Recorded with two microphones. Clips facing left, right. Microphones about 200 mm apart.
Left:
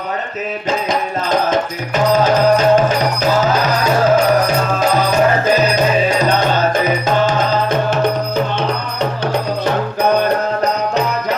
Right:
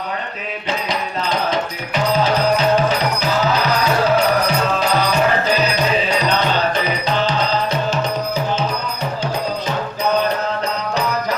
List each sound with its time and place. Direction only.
0.9 s music: 50° left (ahead or behind)
4.1 s music: 45° left (ahead or behind)